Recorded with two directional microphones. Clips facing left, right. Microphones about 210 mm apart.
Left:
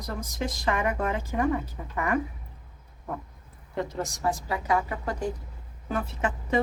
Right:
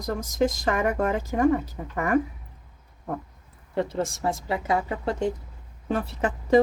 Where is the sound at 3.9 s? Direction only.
25° right (ahead or behind).